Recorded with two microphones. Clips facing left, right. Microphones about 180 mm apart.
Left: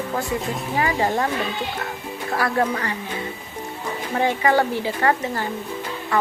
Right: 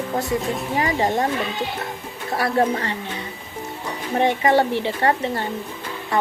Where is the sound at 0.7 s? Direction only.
20° right (ahead or behind).